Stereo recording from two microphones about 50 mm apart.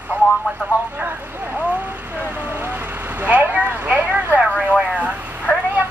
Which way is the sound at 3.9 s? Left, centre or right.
Right.